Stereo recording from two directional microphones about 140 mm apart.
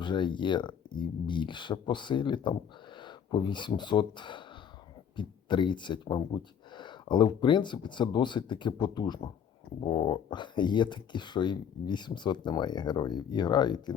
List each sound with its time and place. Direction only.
0.0 s speech: 35° left (ahead or behind)